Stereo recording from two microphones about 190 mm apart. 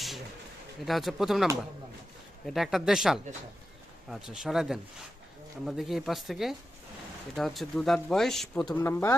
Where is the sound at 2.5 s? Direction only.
Centre (ahead or behind).